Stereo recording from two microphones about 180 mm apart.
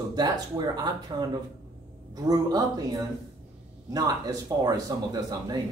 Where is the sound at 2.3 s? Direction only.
20° right (ahead or behind).